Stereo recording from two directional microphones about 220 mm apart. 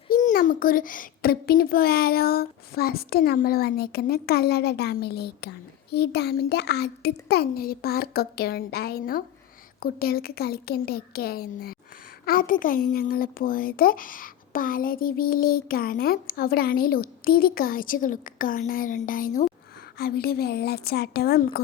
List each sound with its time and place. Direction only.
0.1 s a child's voice: 35° left (ahead or behind)